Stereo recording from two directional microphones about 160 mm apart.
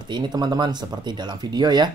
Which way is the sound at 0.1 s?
25° right (ahead or behind).